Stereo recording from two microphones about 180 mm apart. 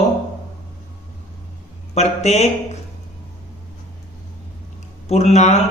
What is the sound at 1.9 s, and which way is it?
Speech, 35° left (ahead or behind).